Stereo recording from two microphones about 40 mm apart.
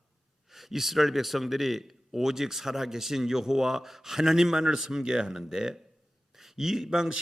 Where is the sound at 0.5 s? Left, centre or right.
Centre.